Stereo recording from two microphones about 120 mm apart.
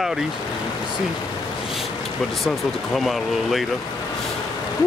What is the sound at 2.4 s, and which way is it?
Speech, centre (ahead or behind).